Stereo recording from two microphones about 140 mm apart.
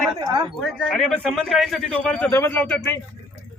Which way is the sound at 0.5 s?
Centre (ahead or behind).